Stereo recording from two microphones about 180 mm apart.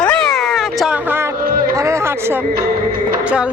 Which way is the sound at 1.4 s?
55° right (ahead or behind).